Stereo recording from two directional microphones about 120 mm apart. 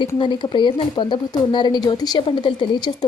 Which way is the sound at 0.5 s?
40° left (ahead or behind).